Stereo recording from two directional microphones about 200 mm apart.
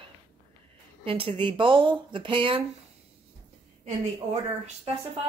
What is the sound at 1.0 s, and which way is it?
Speech, 25° right (ahead or behind).